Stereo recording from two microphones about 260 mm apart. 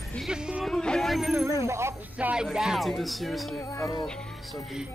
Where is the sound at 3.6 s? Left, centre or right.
Centre.